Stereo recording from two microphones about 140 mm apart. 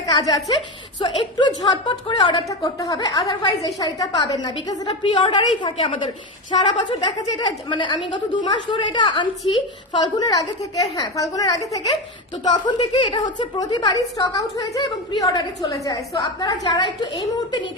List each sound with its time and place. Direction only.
0.0 s a woman's voice: 25° left (ahead or behind)
12.6 s a woman's voice: 40° left (ahead or behind)